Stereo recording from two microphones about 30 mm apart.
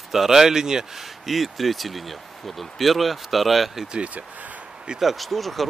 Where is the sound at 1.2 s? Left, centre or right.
Centre.